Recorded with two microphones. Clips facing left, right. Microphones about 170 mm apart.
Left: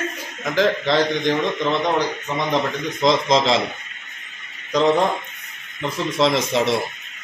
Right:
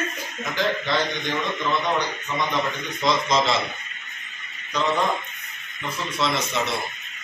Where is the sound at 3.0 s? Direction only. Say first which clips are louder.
Left 4 dB; 90° left.